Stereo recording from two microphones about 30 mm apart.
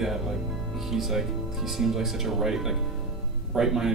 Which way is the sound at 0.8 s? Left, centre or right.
Centre.